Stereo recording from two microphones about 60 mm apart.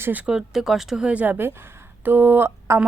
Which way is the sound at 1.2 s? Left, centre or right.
Right.